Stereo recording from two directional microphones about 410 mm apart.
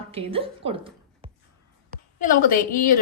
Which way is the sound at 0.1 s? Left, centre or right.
Centre.